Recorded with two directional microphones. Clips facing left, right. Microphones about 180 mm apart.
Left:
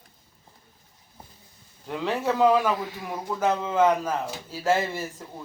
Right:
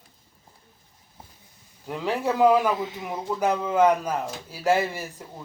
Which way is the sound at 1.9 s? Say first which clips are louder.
Even; 10° right (ahead or behind).